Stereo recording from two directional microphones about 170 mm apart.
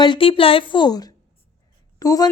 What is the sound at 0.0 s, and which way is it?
A woman's voice, 30° left (ahead or behind).